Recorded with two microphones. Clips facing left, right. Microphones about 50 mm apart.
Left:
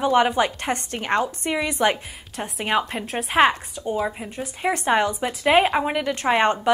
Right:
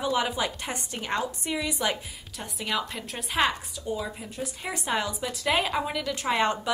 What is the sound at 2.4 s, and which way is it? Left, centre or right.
A woman's voice, left.